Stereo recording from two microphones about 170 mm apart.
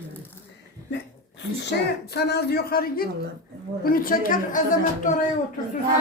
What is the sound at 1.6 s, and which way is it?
A woman's voice, 70° left (ahead or behind).